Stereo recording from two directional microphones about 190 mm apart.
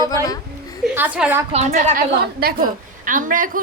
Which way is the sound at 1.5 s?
40° right (ahead or behind).